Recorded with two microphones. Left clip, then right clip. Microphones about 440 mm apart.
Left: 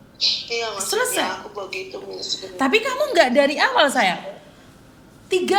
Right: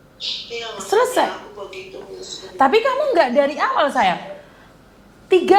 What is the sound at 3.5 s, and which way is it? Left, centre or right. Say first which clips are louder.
Speech: left 1 dB; centre.